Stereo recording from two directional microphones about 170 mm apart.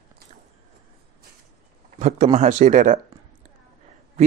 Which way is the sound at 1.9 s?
45° right (ahead or behind).